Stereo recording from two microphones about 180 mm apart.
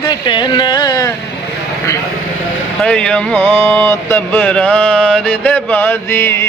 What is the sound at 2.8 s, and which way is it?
Speech, 5° left (ahead or behind).